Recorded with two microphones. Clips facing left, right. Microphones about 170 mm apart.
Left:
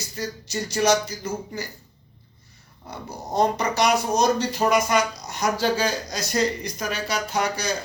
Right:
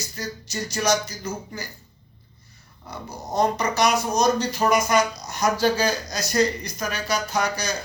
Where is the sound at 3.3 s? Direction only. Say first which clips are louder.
Even; 30° left (ahead or behind).